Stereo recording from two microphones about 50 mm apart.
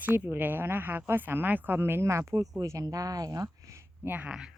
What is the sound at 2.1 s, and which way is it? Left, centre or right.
Speech, right.